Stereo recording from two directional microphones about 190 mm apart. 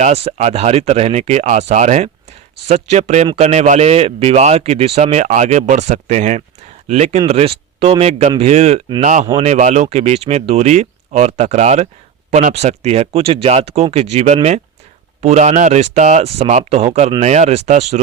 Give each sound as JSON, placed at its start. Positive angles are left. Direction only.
{"t": 0.0, "sound": "speech", "side_deg": -35}